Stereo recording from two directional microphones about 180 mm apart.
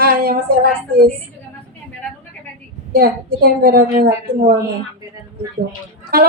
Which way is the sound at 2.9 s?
55° right (ahead or behind).